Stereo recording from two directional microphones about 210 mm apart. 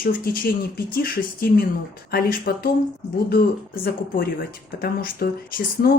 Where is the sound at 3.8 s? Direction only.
45° left (ahead or behind).